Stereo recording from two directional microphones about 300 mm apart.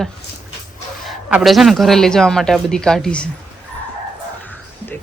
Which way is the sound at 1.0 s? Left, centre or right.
Centre.